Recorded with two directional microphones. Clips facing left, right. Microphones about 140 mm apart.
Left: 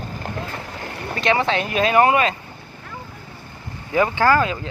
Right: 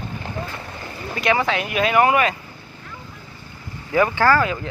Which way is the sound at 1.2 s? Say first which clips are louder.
Left 1 dB; 25° left (ahead or behind).